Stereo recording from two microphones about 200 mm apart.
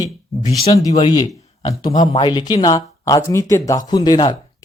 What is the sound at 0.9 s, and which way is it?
A man's voice, 25° left (ahead or behind).